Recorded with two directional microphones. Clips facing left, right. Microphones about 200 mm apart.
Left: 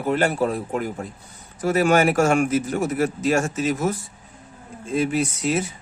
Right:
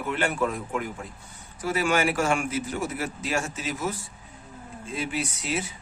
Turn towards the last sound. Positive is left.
turn(degrees=45)  # may be behind; listen again after turning